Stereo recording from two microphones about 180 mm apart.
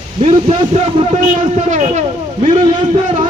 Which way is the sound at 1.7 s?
40° right (ahead or behind).